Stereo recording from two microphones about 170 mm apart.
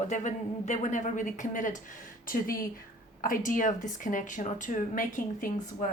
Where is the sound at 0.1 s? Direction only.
45° left (ahead or behind).